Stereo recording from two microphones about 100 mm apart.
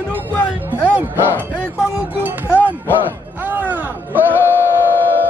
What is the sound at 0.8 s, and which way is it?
Music, 20° right (ahead or behind).